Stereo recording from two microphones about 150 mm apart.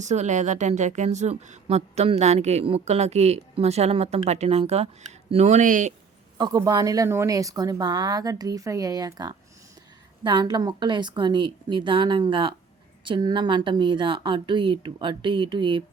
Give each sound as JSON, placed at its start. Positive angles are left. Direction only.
{"t": 0.0, "sound": "a woman's voice", "side_deg": -50}
{"t": 6.3, "sound": "a woman's voice", "side_deg": -25}